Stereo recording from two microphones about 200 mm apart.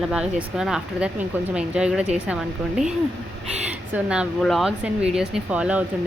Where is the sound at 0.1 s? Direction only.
5° right (ahead or behind).